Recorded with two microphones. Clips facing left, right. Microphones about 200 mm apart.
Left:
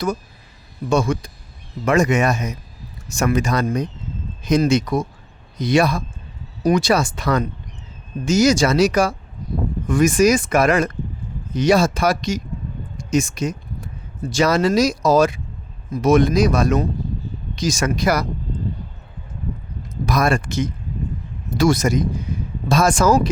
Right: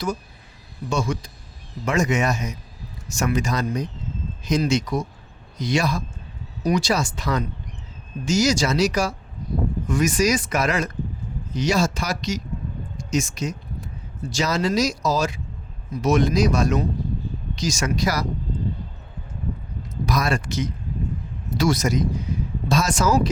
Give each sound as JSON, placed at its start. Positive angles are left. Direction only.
{"t": 0.9, "sound": "speech", "side_deg": 55}
{"t": 20.1, "sound": "speech", "side_deg": 55}